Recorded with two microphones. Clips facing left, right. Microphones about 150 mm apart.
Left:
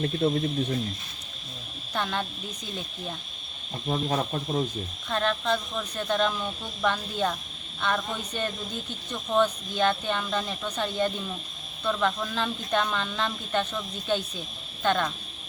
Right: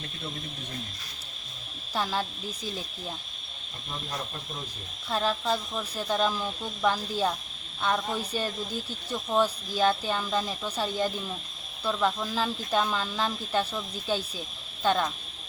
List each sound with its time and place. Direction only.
0.2 s speech: 55° left (ahead or behind)
1.9 s speech: 5° right (ahead or behind)
3.8 s speech: 55° left (ahead or behind)
5.0 s speech: 5° right (ahead or behind)
14.8 s speech: 5° right (ahead or behind)